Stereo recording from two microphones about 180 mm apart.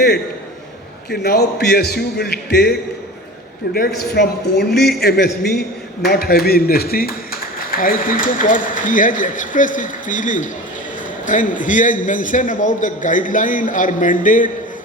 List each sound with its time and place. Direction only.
1.1 s a man's voice: 60° left (ahead or behind); by 14.5 s 45° left (ahead or behind)